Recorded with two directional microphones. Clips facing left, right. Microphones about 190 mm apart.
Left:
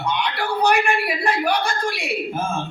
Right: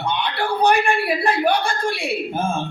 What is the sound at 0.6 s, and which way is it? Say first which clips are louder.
Speech: right 1 dB; 30° right (ahead or behind).